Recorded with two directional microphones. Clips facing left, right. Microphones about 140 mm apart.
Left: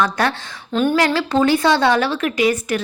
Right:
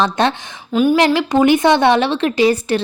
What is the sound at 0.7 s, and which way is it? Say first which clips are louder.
A woman's voice: right 4 dB; 10° right (ahead or behind).